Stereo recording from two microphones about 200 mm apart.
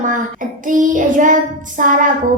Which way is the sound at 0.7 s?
40° right (ahead or behind).